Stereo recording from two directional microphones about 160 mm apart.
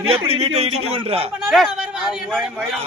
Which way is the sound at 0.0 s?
35° right (ahead or behind).